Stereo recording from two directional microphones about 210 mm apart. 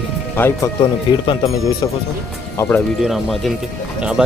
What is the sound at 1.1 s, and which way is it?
Speech, 20° left (ahead or behind).